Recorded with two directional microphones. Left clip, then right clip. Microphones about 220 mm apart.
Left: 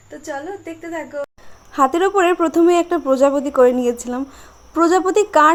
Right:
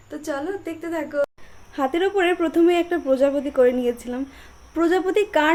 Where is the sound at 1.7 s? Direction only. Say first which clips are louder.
Left 6 dB; 20° left (ahead or behind).